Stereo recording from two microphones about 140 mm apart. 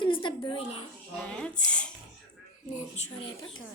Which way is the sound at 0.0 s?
35° left (ahead or behind).